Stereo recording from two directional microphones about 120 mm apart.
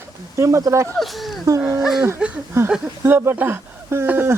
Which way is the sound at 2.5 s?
20° right (ahead or behind).